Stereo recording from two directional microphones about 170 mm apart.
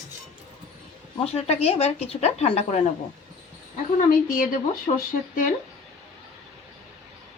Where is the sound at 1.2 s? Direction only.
35° left (ahead or behind).